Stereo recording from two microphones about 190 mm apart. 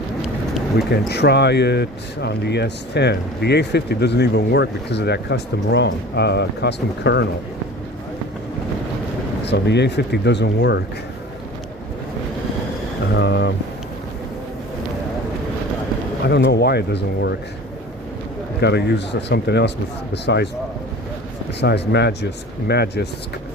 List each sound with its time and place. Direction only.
0.2 s a sound: centre (ahead or behind)
1.0 s speech: 60° left (ahead or behind)
9.4 s speech: 65° left (ahead or behind)
13.1 s speech: 60° left (ahead or behind)
16.2 s speech: 60° left (ahead or behind)
18.6 s speech: 60° left (ahead or behind)
21.6 s speech: 60° left (ahead or behind)